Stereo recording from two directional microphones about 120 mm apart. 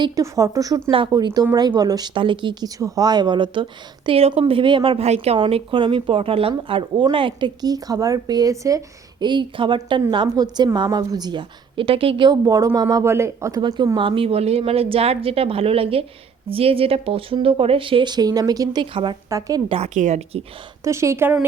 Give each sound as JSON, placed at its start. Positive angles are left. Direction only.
{"t": 0.0, "sound": "speech", "side_deg": -25}
{"t": 0.9, "sound": "speech", "side_deg": -50}
{"t": 1.1, "sound": "speech", "side_deg": -35}
{"t": 5.4, "sound": "speech", "side_deg": -50}
{"t": 9.2, "sound": "speech", "side_deg": -40}
{"t": 13.6, "sound": "speech", "side_deg": -40}
{"t": 19.3, "sound": "speech", "side_deg": -30}
{"t": 19.6, "sound": "speech", "side_deg": -50}
{"t": 19.9, "sound": "a woman's voice", "side_deg": -85}
{"t": 20.8, "sound": "speech", "side_deg": -25}